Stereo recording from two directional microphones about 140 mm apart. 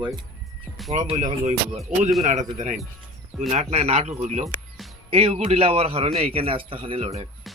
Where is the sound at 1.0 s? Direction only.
55° right (ahead or behind).